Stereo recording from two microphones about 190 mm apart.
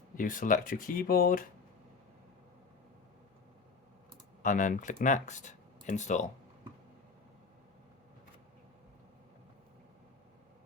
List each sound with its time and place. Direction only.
0.2 s speech: 45° left (ahead or behind)
4.4 s speech: 45° left (ahead or behind)